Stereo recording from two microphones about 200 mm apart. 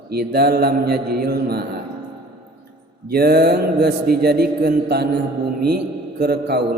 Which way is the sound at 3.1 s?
50° right (ahead or behind).